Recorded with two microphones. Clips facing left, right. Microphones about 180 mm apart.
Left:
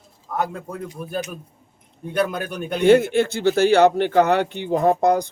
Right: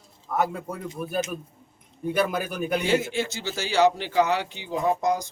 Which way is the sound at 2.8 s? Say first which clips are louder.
Left 14 dB; 60° left (ahead or behind).